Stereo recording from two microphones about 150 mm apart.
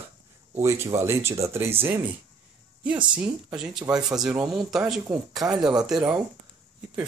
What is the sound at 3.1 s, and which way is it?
Speech, 5° right (ahead or behind).